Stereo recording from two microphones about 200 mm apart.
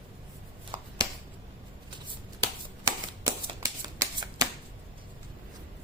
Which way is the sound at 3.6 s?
15° right (ahead or behind).